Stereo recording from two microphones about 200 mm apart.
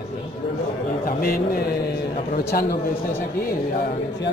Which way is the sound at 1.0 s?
50° left (ahead or behind).